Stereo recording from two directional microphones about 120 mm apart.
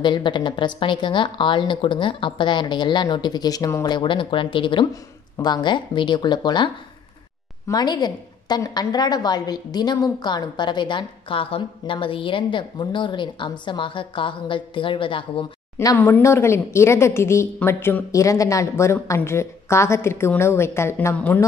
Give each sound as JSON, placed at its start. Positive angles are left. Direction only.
{"t": 0.0, "sound": "a woman's voice", "side_deg": 40}
{"t": 15.8, "sound": "speech", "side_deg": 25}